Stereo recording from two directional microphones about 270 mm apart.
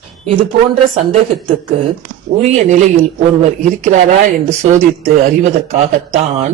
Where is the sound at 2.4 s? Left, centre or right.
Right.